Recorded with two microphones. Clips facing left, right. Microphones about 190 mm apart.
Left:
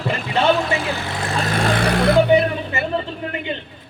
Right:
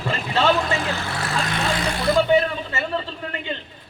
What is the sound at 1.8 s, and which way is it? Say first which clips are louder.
Speech: left 5 dB; 65° left (ahead or behind).